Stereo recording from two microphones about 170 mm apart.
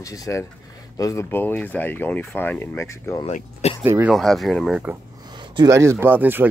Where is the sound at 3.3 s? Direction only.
40° left (ahead or behind).